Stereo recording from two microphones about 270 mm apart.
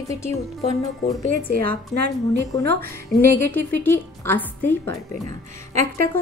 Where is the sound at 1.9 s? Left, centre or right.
Centre.